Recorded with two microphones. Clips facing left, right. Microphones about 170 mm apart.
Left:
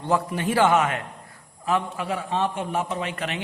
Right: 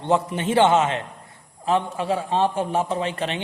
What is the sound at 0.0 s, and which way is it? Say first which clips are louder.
A man's voice: right 2 dB; 25° right (ahead or behind).